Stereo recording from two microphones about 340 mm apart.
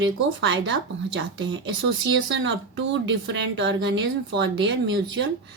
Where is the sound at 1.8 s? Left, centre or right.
Right.